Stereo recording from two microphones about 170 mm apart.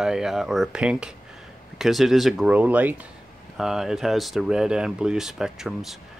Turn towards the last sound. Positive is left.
turn(degrees=0)  # may be behind; listen again after turning